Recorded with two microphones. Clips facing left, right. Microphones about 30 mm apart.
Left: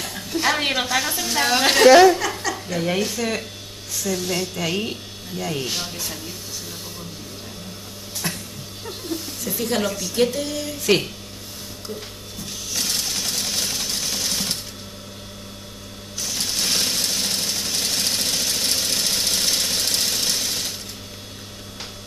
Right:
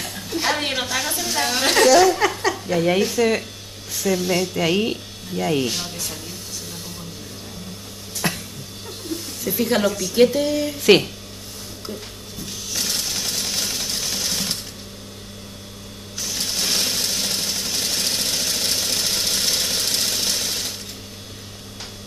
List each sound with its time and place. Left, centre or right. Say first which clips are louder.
0.0 s a sound: left 1 dB; centre
0.6 s a woman's voice: left 2 dB; centre
1.9 s speech: left 5 dB; left
2.7 s speech: right 4 dB; centre
5.7 s speech: even; centre
8.2 s a sound: right 4 dB; right
9.1 s a sound: right 3 dB; centre
9.8 s speech: right 4 dB; centre
10.1 s speech: right 5 dB; centre
12.4 s sewing machine: even; centre
16.2 s sewing machine: even; centre